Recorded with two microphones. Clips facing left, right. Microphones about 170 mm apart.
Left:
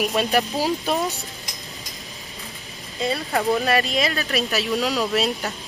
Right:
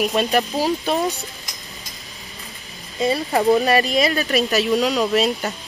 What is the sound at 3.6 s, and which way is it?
Speech, centre (ahead or behind).